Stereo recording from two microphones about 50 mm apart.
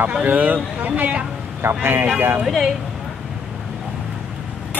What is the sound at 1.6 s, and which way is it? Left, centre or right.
Speech, right.